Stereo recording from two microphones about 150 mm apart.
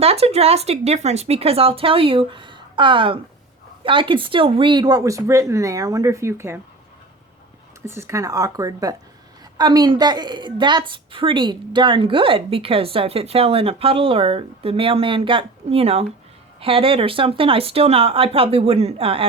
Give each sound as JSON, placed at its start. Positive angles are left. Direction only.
{"t": 0.0, "sound": "a woman's voice", "side_deg": -40}
{"t": 7.9, "sound": "a woman's voice", "side_deg": -20}